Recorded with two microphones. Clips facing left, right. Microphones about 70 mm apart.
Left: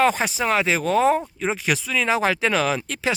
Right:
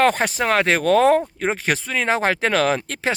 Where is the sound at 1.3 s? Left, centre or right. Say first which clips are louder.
Right 2 dB; right.